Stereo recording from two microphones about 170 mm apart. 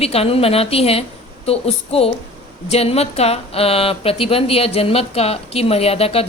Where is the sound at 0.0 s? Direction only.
35° left (ahead or behind).